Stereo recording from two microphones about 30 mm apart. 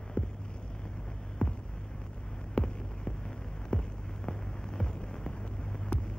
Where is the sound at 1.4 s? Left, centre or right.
Left.